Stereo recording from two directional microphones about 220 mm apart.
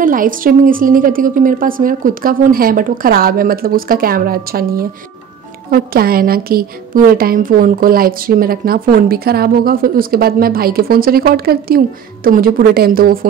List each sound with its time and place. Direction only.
0.0 s a woman's voice: 40° right (ahead or behind)